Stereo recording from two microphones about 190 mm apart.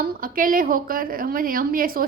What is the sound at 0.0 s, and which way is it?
A woman's voice, 45° right (ahead or behind).